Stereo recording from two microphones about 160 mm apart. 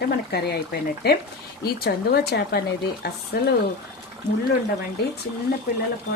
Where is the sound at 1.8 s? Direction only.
75° left (ahead or behind).